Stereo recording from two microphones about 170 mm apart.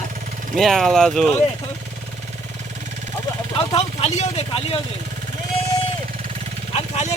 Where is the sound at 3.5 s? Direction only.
40° left (ahead or behind).